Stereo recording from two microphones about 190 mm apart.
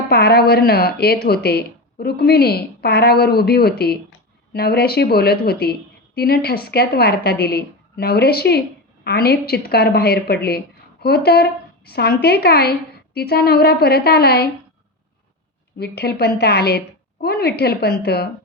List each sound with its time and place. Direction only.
0.1 s speech: 55° left (ahead or behind)
15.8 s speech: 55° left (ahead or behind)